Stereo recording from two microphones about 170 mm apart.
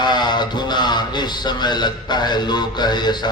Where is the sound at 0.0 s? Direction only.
25° left (ahead or behind).